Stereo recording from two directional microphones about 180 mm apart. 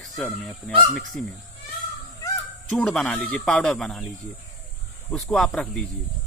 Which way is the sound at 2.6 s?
5° left (ahead or behind).